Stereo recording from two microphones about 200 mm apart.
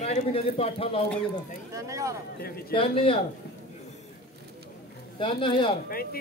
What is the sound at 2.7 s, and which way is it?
Speech, 25° left (ahead or behind).